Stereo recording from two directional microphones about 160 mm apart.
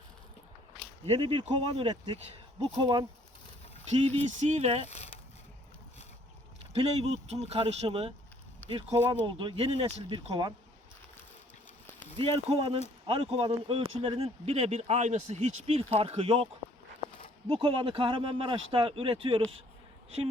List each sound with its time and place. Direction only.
1.0 s speech: 40° right (ahead or behind)
3.8 s speech: 45° right (ahead or behind)
6.7 s speech: 40° right (ahead or behind)
11.9 s speech: 35° right (ahead or behind)
17.5 s speech: 35° right (ahead or behind)